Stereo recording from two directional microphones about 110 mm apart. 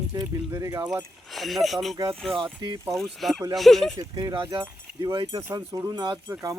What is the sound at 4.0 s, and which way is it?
Speech, 35° right (ahead or behind).